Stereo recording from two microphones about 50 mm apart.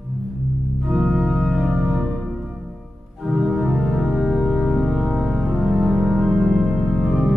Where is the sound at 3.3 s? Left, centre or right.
Centre.